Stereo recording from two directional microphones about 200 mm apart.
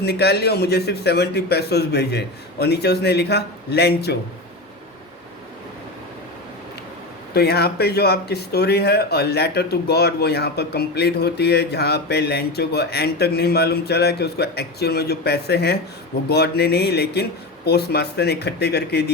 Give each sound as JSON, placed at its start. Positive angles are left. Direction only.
{"t": 0.0, "sound": "a man's voice", "side_deg": 55}
{"t": 7.3, "sound": "speech", "side_deg": 55}